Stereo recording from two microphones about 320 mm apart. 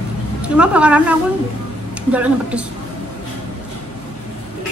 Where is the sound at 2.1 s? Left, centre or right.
Centre.